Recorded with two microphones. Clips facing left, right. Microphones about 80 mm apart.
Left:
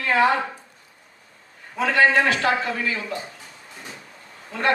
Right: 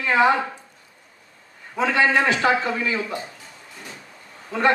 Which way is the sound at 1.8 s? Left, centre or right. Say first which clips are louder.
Left 1 dB; right.